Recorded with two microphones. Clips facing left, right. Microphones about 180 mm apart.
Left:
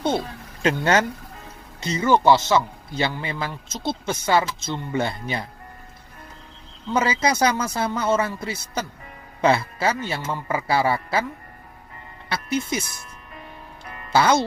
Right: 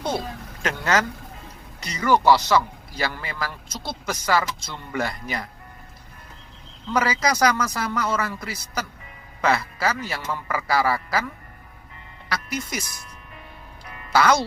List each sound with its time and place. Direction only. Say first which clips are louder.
0.6 s a man's voice: left 4 dB; 30° left (ahead or behind)
6.9 s a man's voice: left 1 dB; 25° left (ahead or behind)
12.3 s a man's voice: left 4 dB; 25° left (ahead or behind)
14.1 s a man's voice: left 1 dB; 25° left (ahead or behind)